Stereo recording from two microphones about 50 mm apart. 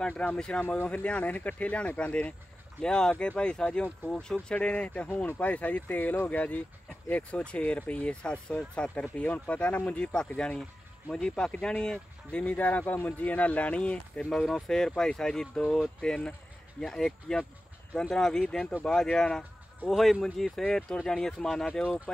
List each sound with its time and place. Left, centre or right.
0.2 s speech: centre
12.4 s speech: left
14.3 s speech: centre
19.9 s speech: centre
21.8 s speech: centre